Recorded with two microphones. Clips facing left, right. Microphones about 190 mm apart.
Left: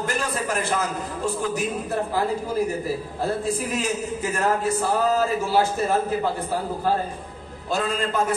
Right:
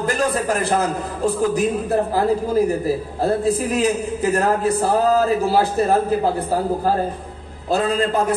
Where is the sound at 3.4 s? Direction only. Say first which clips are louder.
Right 7 dB; 35° right (ahead or behind).